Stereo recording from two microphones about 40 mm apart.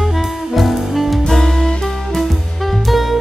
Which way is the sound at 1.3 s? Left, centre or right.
Centre.